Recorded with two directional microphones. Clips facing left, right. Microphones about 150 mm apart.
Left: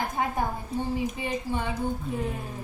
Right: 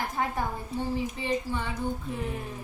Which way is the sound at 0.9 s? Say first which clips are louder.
Even; 15° left (ahead or behind).